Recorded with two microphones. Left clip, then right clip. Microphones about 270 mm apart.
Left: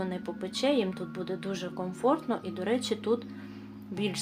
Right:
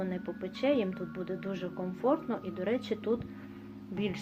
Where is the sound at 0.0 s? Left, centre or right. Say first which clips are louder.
Left 2 dB; centre.